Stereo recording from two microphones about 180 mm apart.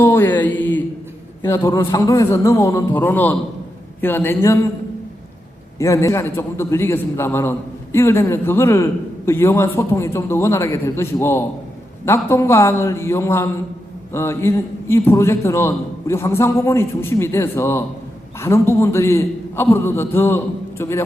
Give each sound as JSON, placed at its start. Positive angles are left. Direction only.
{"t": 0.0, "sound": "a sound", "side_deg": 10}
{"t": 1.4, "sound": "a man's voice", "side_deg": 15}
{"t": 5.8, "sound": "a man's voice", "side_deg": 15}